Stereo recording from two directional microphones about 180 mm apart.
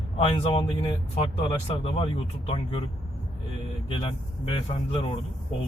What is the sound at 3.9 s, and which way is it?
Speech, 30° left (ahead or behind).